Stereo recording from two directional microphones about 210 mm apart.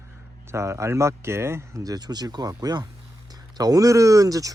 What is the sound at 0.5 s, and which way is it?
Speech, 15° right (ahead or behind).